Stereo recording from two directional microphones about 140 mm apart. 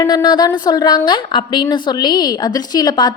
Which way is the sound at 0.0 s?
30° left (ahead or behind).